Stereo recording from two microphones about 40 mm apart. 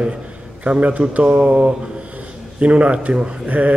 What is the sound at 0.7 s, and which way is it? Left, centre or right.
A man's voice, right.